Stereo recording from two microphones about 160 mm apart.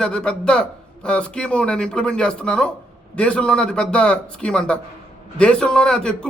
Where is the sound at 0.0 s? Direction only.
5° left (ahead or behind).